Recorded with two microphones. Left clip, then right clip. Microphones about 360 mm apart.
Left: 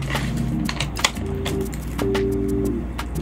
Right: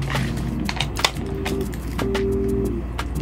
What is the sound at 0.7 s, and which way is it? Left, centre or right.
Typing, centre.